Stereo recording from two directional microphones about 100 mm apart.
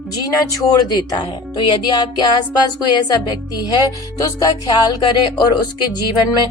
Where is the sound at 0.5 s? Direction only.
40° left (ahead or behind).